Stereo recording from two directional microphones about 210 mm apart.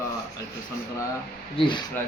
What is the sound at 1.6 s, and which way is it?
Speech, 25° left (ahead or behind).